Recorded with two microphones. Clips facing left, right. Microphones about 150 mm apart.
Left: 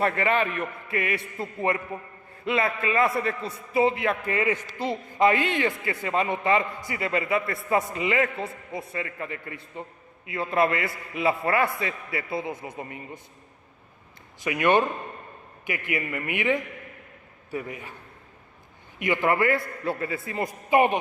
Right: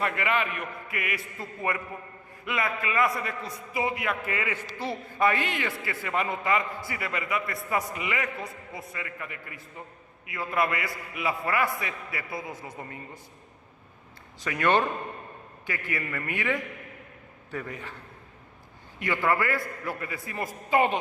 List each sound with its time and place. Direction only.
0.0 s a man's voice: 35° left (ahead or behind)
4.5 s a man's voice: 15° left (ahead or behind)
14.4 s a man's voice: 15° left (ahead or behind)
18.9 s a man's voice: 15° left (ahead or behind)